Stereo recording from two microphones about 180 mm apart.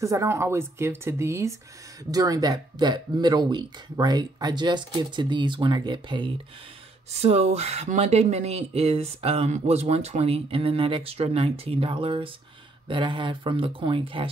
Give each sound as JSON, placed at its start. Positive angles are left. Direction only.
{"t": 0.0, "sound": "speech", "side_deg": -15}